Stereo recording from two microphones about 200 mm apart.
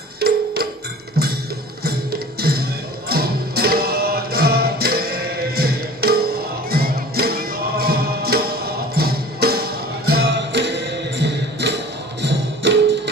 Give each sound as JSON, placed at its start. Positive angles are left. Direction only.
{"t": 0.2, "sound": "music", "side_deg": -50}
{"t": 1.8, "sound": "music", "side_deg": -50}